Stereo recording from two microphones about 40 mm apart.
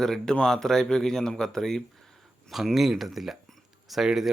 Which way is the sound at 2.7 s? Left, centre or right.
Centre.